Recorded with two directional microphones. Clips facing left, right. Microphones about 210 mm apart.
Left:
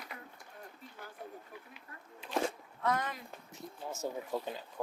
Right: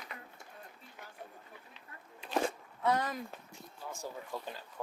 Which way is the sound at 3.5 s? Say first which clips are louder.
Left 3 dB; 20° left (ahead or behind).